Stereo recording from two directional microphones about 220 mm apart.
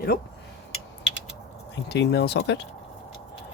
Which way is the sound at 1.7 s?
50° left (ahead or behind).